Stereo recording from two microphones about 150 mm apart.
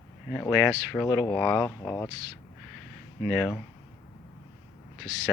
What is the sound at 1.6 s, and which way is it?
Speech, 15° left (ahead or behind).